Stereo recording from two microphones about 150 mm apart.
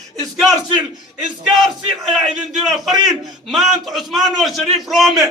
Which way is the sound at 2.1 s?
5° right (ahead or behind).